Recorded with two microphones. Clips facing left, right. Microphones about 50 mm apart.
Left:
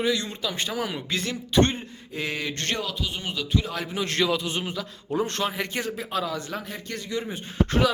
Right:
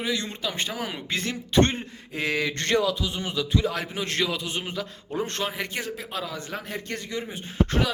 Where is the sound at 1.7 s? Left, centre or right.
Right.